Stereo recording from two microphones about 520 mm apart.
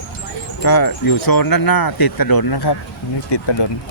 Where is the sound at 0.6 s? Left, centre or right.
Left.